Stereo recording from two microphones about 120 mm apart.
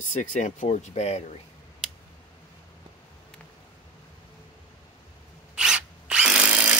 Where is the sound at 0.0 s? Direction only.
85° left; by 1.3 s 65° left (ahead or behind).